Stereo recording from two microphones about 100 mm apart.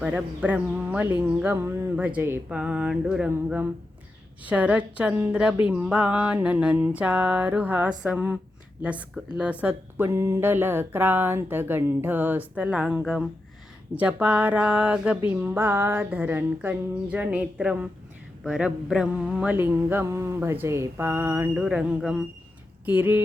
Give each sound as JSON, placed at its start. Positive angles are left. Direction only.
{"t": 0.0, "sound": "speech", "side_deg": -15}
{"t": 2.0, "sound": "mantra", "side_deg": -20}
{"t": 2.5, "sound": "speech", "side_deg": -10}
{"t": 3.2, "sound": "mantra", "side_deg": -20}
{"t": 4.4, "sound": "speech", "side_deg": -15}
{"t": 10.1, "sound": "mantra", "side_deg": -25}
{"t": 13.9, "sound": "speech", "side_deg": -15}
{"t": 15.3, "sound": "mantra", "side_deg": -20}
{"t": 18.4, "sound": "speech", "side_deg": -10}
{"t": 18.9, "sound": "mantra", "side_deg": -10}
{"t": 21.5, "sound": "speech", "side_deg": -10}
{"t": 22.9, "sound": "mantra", "side_deg": -20}